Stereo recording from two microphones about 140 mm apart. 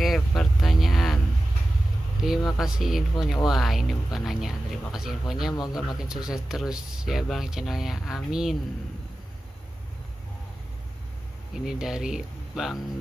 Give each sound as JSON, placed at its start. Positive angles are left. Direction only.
{"t": 0.4, "sound": "a sound", "side_deg": 0}
{"t": 2.2, "sound": "speech", "side_deg": 0}
{"t": 5.5, "sound": "speech", "side_deg": 30}
{"t": 5.9, "sound": "speech", "side_deg": -5}
{"t": 11.5, "sound": "speech", "side_deg": -5}